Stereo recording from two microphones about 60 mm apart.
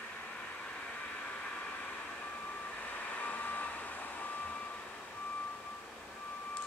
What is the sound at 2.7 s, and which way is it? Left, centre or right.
Vehicle, left.